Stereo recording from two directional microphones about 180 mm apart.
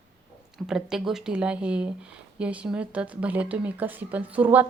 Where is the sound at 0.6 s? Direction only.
5° right (ahead or behind).